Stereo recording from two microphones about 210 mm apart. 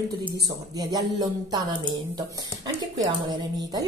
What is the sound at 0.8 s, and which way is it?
A woman's voice, 20° right (ahead or behind).